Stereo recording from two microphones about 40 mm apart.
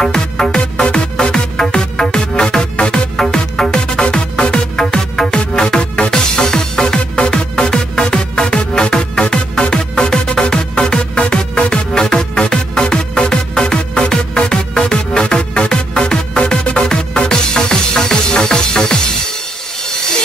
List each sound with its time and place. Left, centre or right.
0.0 s music: centre